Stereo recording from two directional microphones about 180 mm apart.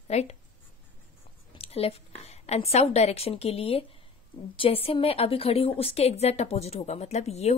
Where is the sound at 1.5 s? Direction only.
35° left (ahead or behind).